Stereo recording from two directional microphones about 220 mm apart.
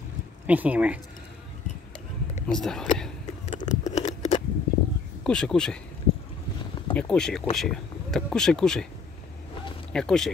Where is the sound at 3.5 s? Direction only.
35° left (ahead or behind).